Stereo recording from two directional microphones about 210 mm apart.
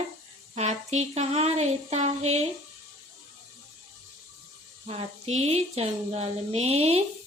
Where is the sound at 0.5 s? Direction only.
30° right (ahead or behind).